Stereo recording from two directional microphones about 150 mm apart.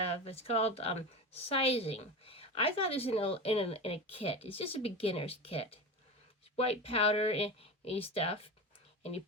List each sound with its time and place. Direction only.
0.0 s speech: 40° left (ahead or behind)